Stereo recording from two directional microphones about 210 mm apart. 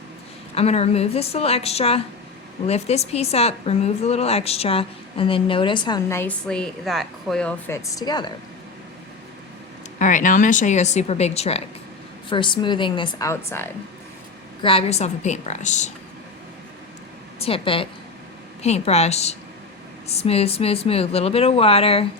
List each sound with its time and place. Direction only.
0.5 s a woman's voice: 30° left (ahead or behind); by 7.8 s 5° left (ahead or behind)
7.9 s a woman's voice: 20° left (ahead or behind)
10.0 s a woman's voice: 40° left (ahead or behind); by 13.7 s 10° left (ahead or behind)
14.6 s speech: 25° left (ahead or behind)
17.4 s a woman's voice: 25° left (ahead or behind)